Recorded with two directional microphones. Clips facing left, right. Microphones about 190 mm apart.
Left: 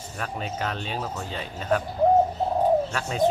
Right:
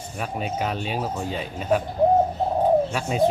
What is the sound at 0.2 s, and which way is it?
Speech, 15° right (ahead or behind).